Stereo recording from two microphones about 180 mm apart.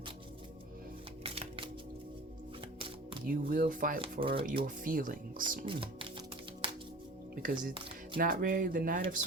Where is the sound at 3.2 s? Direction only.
55° right (ahead or behind).